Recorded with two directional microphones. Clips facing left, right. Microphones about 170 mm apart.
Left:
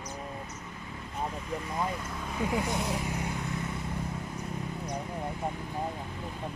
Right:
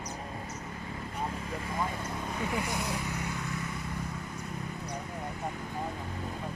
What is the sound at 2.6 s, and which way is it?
Vehicle, 20° left (ahead or behind).